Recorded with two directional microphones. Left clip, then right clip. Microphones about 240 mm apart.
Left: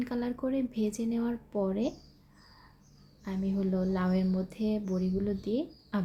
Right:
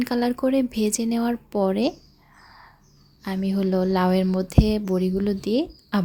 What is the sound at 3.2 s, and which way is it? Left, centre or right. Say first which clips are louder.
Speech: right 8 dB; right.